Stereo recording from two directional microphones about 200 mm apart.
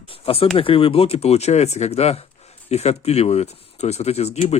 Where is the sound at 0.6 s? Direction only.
25° left (ahead or behind).